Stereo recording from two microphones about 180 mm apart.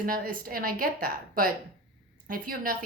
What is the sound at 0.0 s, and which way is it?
Speech, 50° right (ahead or behind).